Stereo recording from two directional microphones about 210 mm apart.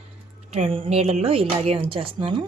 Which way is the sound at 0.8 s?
30° right (ahead or behind).